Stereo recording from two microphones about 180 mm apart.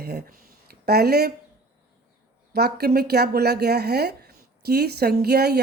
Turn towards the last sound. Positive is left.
turn(degrees=-60)  # may be behind; listen again after turning